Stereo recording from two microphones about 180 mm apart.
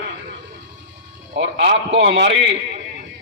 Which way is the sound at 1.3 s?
65° right (ahead or behind).